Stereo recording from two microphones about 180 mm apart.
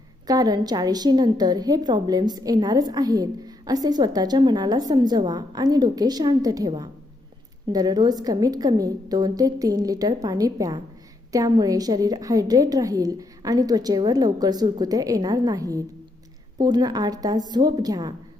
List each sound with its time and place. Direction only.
0.3 s a woman's voice: 20° right (ahead or behind)